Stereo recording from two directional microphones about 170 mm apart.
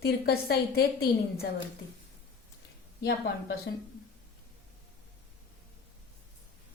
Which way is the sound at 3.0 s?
75° left (ahead or behind).